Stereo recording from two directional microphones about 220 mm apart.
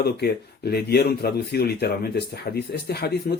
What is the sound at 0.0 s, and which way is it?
Speech, 45° left (ahead or behind).